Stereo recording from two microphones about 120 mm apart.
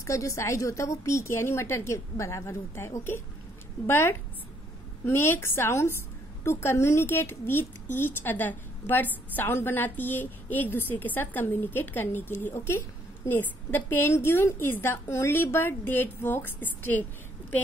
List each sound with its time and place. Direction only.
0.0 s a woman's voice: 25° left (ahead or behind)